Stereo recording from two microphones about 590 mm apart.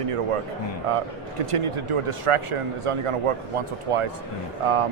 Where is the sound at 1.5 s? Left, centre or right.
Right.